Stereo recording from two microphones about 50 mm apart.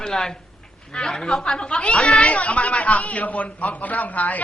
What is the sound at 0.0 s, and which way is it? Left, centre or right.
Speech, centre.